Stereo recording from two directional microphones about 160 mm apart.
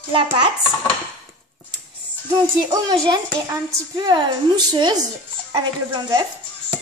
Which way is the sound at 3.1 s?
25° right (ahead or behind).